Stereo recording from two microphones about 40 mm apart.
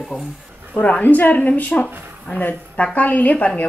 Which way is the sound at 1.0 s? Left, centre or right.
Left.